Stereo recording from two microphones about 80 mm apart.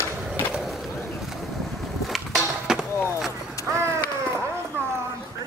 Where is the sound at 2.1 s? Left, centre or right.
Centre.